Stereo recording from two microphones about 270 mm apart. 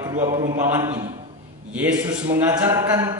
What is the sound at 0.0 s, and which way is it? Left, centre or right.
A man's voice, centre.